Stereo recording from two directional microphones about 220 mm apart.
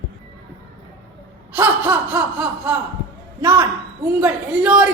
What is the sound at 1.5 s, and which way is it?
A woman's voice, 10° right (ahead or behind).